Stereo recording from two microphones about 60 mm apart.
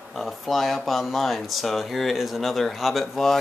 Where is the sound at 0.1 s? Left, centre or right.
Centre.